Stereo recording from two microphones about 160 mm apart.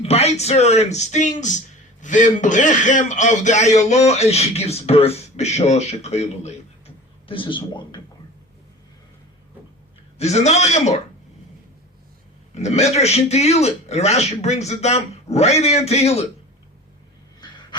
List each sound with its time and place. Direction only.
0.0 s speech: 40° left (ahead or behind)
10.2 s speech: 45° left (ahead or behind)
12.5 s a man's voice: 45° left (ahead or behind)
17.4 s a sound: 25° left (ahead or behind)